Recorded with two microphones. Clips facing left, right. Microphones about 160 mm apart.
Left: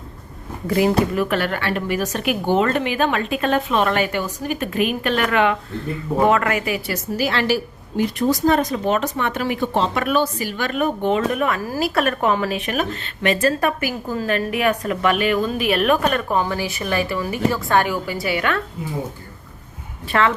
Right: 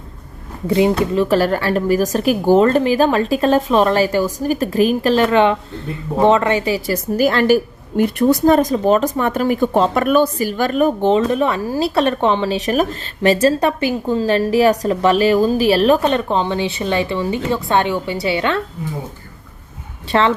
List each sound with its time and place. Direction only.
0.7 s a woman's voice: 25° right (ahead or behind)
7.2 s a woman's voice: 45° right (ahead or behind)
8.5 s a woman's voice: 35° right (ahead or behind)
12.6 s a woman's voice: 40° right (ahead or behind)
13.4 s a woman's voice: 25° right (ahead or behind)
20.1 s a woman's voice: 30° right (ahead or behind)